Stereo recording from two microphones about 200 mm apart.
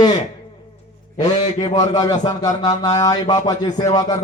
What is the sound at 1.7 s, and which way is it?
A man's voice, 20° left (ahead or behind).